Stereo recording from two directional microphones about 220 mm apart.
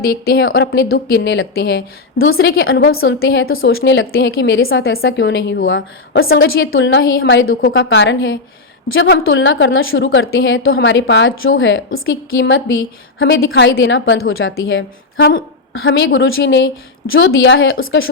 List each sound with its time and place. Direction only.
0.0 s a woman's voice: 45° left (ahead or behind)
2.6 s a woman's voice: 65° left (ahead or behind)